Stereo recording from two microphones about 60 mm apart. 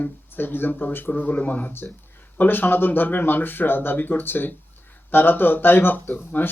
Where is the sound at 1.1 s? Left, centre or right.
Left.